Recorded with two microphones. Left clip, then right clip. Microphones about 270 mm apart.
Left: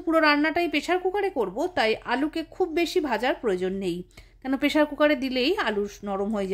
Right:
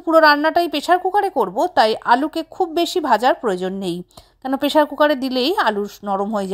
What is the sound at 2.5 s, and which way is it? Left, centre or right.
Speech, centre.